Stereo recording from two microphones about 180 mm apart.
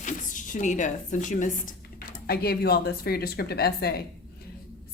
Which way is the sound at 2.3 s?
60° left (ahead or behind).